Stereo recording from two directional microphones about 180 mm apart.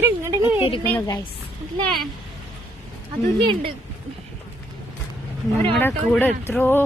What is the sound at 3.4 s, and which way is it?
Speech, 30° right (ahead or behind).